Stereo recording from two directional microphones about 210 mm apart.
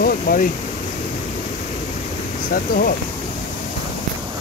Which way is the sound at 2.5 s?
45° left (ahead or behind).